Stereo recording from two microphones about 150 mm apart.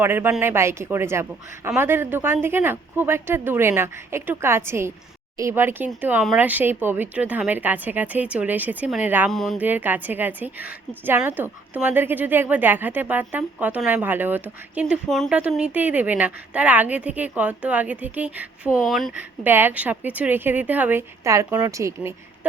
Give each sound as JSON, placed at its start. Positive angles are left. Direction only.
{"t": 0.0, "sound": "a woman's voice", "side_deg": -15}
{"t": 9.3, "sound": "speech", "side_deg": 0}
{"t": 9.6, "sound": "a woman's voice", "side_deg": -10}
{"t": 15.1, "sound": "a woman's voice", "side_deg": 0}
{"t": 19.5, "sound": "a woman's voice", "side_deg": -15}